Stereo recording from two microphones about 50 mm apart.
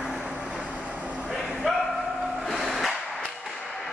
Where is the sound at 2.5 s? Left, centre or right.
Centre.